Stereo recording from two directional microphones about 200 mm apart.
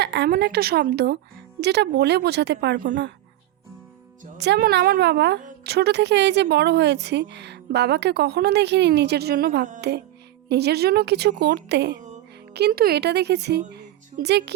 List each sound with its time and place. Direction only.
0.0 s a woman's voice: 55° right (ahead or behind)
4.4 s a woman's voice: 55° right (ahead or behind)